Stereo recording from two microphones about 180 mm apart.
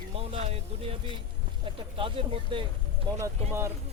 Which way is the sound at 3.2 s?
15° right (ahead or behind).